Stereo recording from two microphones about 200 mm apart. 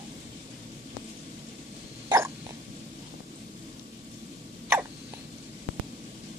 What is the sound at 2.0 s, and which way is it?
Hiccup, 15° right (ahead or behind).